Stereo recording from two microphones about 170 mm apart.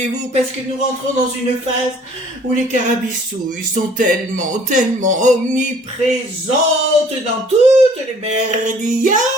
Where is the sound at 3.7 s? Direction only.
50° right (ahead or behind).